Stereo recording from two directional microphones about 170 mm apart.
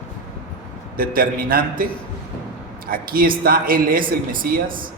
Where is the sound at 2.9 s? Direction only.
60° right (ahead or behind).